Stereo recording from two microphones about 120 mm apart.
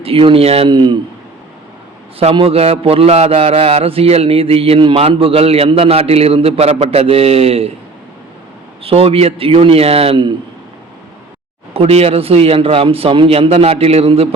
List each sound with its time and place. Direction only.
0.0 s a man's voice: 50° right (ahead or behind)
2.1 s a man's voice: 50° right (ahead or behind)
8.8 s a man's voice: 55° right (ahead or behind)
11.7 s a man's voice: 55° right (ahead or behind)